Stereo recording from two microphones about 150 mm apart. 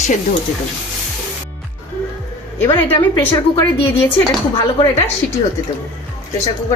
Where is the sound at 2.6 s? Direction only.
15° left (ahead or behind).